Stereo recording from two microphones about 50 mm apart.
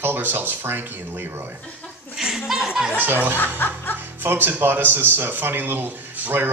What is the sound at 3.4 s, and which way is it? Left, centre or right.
Speech, left.